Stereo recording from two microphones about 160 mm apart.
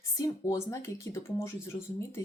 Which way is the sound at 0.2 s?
20° left (ahead or behind).